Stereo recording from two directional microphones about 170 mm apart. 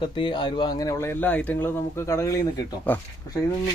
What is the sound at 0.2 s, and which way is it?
Speech, 30° left (ahead or behind).